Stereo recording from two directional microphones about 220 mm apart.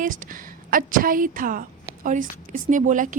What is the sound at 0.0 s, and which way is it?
A woman's voice, 40° right (ahead or behind).